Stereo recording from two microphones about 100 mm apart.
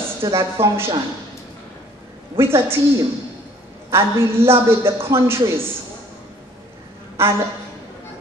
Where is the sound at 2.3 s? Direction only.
25° right (ahead or behind).